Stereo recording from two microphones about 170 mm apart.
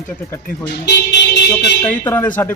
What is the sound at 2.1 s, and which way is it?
Speech, 15° left (ahead or behind).